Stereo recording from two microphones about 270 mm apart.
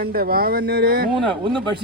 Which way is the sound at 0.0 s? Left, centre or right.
Right.